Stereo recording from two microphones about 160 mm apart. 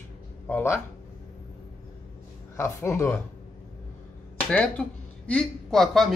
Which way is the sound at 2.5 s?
15° left (ahead or behind).